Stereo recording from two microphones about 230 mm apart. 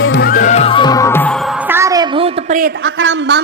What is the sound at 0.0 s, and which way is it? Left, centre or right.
Music, left.